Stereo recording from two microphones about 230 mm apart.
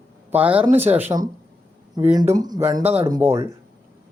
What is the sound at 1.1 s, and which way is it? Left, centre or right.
Speech, centre.